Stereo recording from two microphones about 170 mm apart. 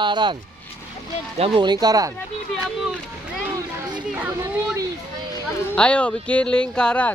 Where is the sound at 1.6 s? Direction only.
25° right (ahead or behind).